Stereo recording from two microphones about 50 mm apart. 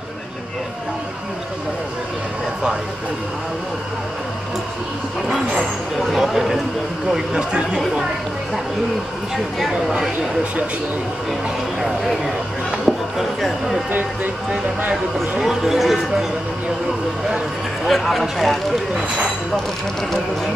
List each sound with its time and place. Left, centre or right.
5.9 s speech: centre
7.1 s speech: centre
9.9 s speech: centre
12.8 s music: centre
15.3 s speech: centre
17.8 s speech: centre